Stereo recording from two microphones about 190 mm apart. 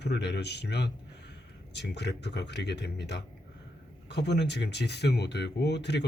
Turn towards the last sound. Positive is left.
turn(degrees=65)  # may be behind; listen again after turning